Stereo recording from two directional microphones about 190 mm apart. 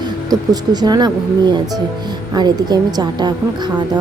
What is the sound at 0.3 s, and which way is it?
Speech, 20° right (ahead or behind).